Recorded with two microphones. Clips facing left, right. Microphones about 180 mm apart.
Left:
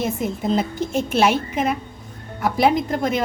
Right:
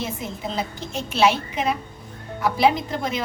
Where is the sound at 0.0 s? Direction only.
50° left (ahead or behind).